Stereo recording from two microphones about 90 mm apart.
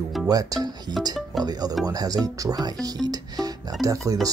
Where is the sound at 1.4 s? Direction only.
50° right (ahead or behind).